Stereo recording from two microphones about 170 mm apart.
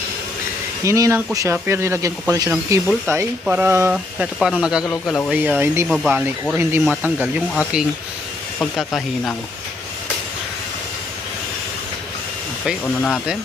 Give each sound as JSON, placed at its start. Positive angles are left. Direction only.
{"t": 0.9, "sound": "speech", "side_deg": -20}
{"t": 5.3, "sound": "speech", "side_deg": -10}
{"t": 8.7, "sound": "speech", "side_deg": 0}
{"t": 12.8, "sound": "speech", "side_deg": 10}